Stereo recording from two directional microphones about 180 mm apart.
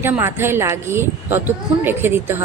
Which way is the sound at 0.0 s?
15° right (ahead or behind).